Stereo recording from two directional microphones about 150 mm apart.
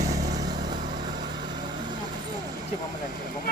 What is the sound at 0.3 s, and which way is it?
Vehicle, 25° right (ahead or behind).